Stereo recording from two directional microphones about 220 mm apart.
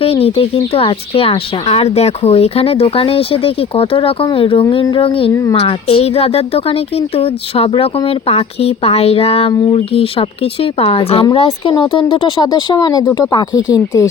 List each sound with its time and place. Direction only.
0.0 s speech: 25° left (ahead or behind)